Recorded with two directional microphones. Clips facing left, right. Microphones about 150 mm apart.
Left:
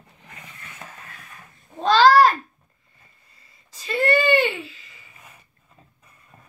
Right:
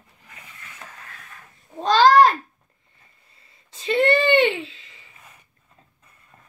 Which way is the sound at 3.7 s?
25° right (ahead or behind).